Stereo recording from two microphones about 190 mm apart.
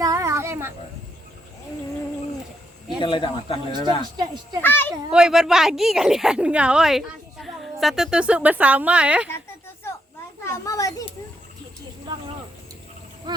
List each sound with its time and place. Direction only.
0.0 s a sound: 15° right (ahead or behind)
3.0 s speech: 25° left (ahead or behind)
3.8 s speech: 20° right (ahead or behind)
4.6 s a child's voice: 10° left (ahead or behind)
5.1 s speech: 5° right (ahead or behind)
10.4 s a child's voice: 15° left (ahead or behind)